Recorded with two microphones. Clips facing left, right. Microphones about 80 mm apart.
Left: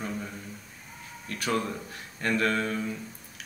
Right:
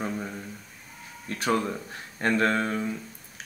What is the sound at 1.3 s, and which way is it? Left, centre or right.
A man's voice, right.